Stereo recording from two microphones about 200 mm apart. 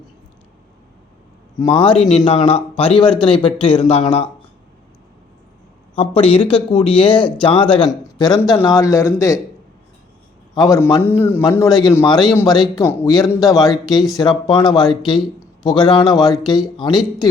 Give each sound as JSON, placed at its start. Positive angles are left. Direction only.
{"t": 1.5, "sound": "speech", "side_deg": 25}
{"t": 6.0, "sound": "a man's voice", "side_deg": 30}
{"t": 10.5, "sound": "a man's voice", "side_deg": 20}
{"t": 15.4, "sound": "a sound", "side_deg": 20}
{"t": 16.1, "sound": "speech", "side_deg": 20}
{"t": 16.9, "sound": "speech", "side_deg": 0}